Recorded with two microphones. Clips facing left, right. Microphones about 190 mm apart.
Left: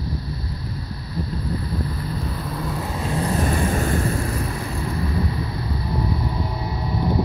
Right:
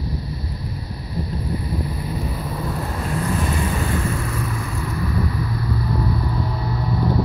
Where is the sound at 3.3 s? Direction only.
45° left (ahead or behind); by 7.1 s 20° left (ahead or behind).